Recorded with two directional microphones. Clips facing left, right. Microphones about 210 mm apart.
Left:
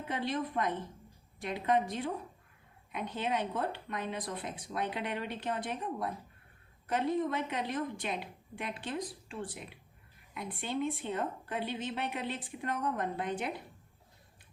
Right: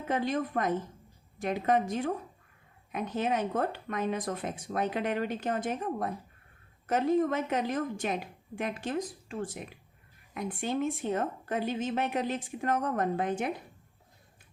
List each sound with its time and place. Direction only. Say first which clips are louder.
0.1 s a woman's voice: right 5 dB; 45° right (ahead or behind)